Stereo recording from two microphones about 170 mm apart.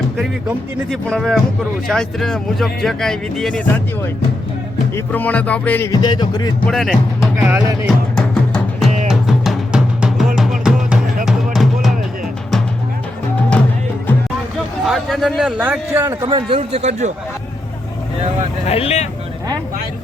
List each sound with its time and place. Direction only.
0.2 s speech: centre (ahead or behind)
4.9 s music: 10° left (ahead or behind)
5.9 s speech: 25° left (ahead or behind)
6.7 s speech: centre (ahead or behind)
7.9 s music: centre (ahead or behind)
14.8 s a man's voice: centre (ahead or behind)
16.2 s speech: 35° right (ahead or behind)
18.6 s speech: 35° left (ahead or behind)